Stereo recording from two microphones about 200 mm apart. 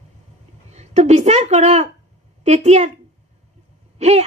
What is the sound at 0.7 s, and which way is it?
A woman's voice, 35° right (ahead or behind).